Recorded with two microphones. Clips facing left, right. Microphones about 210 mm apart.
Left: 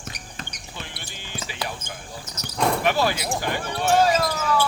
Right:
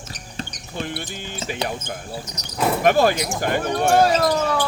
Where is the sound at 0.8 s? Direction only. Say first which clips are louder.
Right 12 dB; 50° right (ahead or behind).